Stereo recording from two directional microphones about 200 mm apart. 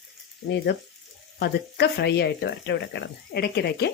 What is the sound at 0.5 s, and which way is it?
Speech, 55° left (ahead or behind).